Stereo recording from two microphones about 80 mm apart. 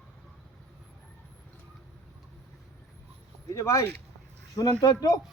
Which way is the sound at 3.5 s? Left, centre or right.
Left.